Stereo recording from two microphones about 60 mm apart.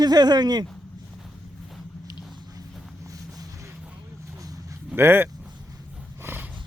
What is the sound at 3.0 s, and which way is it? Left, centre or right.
Vehicle, right.